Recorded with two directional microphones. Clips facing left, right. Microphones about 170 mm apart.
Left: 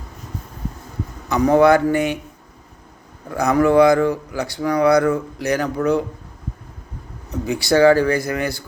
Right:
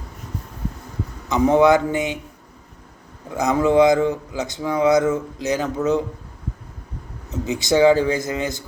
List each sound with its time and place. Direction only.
1.3 s speech: 20° right (ahead or behind)
3.2 s speech: 20° right (ahead or behind)
7.4 s speech: 20° right (ahead or behind)